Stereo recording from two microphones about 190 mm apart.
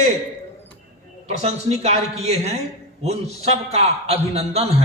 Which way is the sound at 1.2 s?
35° right (ahead or behind).